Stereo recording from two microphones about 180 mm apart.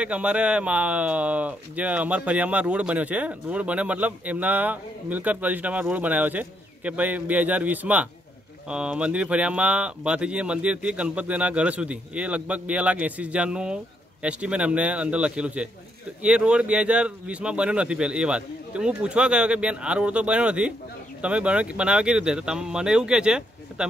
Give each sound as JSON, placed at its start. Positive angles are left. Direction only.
{"t": 0.0, "sound": "speech", "side_deg": -5}